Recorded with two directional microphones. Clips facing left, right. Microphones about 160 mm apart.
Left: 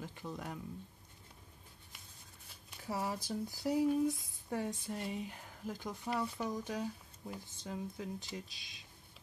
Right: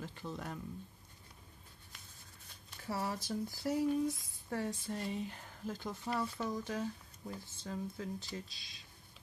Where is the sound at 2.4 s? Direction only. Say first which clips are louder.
Even; 15° left (ahead or behind).